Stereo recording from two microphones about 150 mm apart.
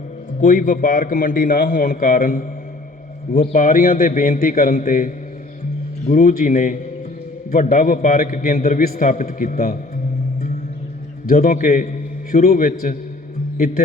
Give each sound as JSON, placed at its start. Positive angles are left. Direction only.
{"t": 0.4, "sound": "a man's voice", "side_deg": 65}
{"t": 3.5, "sound": "a man's voice", "side_deg": 65}
{"t": 11.3, "sound": "a man's voice", "side_deg": 70}